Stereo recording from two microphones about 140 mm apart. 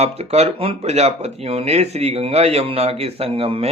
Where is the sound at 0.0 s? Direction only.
50° right (ahead or behind).